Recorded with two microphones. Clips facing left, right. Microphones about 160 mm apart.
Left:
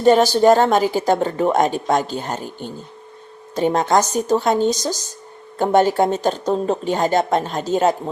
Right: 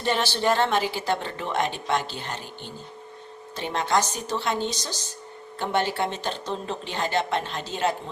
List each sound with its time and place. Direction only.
0.0 s speech: 40° left (ahead or behind)